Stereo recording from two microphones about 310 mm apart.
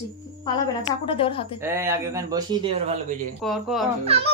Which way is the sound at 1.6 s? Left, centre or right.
Centre.